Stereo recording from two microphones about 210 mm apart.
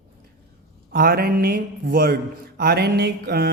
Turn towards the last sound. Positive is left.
turn(degrees=-50)  # may be behind; listen again after turning